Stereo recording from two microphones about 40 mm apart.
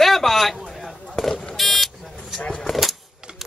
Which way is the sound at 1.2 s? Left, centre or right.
Centre.